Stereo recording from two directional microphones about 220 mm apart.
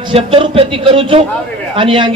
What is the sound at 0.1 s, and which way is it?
A man's voice, 25° right (ahead or behind).